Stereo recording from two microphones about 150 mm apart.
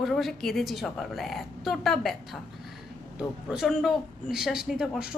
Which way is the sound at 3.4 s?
Centre (ahead or behind).